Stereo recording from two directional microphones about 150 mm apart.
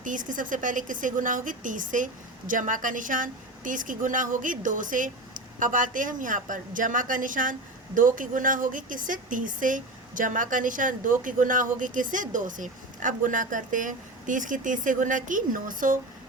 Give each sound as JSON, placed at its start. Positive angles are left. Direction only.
{"t": 0.0, "sound": "a woman's voice", "side_deg": -60}